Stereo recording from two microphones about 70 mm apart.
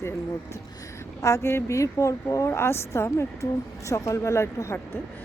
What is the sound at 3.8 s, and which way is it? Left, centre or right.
Speech, left.